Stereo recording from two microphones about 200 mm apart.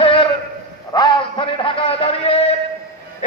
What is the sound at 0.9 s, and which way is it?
A man's voice, 25° left (ahead or behind).